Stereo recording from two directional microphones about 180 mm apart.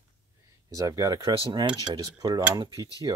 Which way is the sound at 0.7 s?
20° right (ahead or behind).